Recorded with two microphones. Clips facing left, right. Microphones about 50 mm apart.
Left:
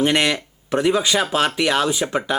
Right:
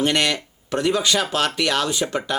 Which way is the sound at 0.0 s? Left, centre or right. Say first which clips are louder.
Left 2 dB; centre.